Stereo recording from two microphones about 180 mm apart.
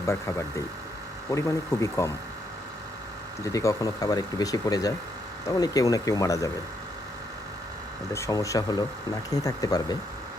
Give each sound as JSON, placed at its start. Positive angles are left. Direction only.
{"t": 0.0, "sound": "speech", "side_deg": 15}
{"t": 3.4, "sound": "speech", "side_deg": 15}
{"t": 8.1, "sound": "speech", "side_deg": 15}